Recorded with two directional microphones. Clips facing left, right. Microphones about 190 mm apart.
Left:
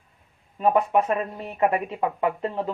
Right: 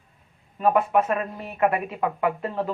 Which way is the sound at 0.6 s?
20° left (ahead or behind).